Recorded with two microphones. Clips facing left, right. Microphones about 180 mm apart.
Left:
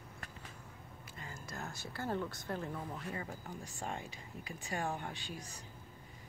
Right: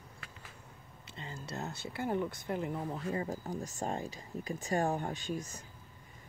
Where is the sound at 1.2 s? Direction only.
25° right (ahead or behind).